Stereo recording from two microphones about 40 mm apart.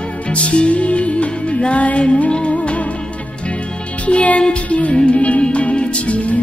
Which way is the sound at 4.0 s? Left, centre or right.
Left.